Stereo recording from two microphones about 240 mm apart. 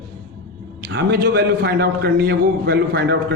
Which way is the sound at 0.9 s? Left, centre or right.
Right.